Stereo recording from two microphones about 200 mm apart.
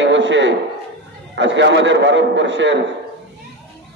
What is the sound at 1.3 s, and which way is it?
A man's voice, 65° right (ahead or behind).